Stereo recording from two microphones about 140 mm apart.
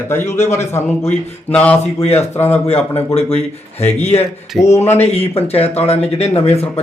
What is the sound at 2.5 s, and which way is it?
Speech, 45° left (ahead or behind).